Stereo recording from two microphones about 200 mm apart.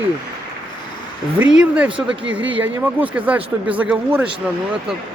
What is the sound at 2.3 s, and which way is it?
A man's voice, 5° right (ahead or behind).